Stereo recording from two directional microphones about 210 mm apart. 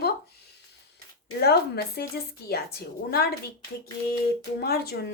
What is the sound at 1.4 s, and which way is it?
Speech, 50° left (ahead or behind).